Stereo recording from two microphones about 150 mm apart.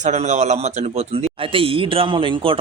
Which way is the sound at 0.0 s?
50° right (ahead or behind).